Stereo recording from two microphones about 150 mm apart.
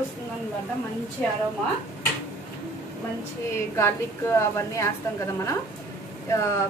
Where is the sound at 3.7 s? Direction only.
20° left (ahead or behind).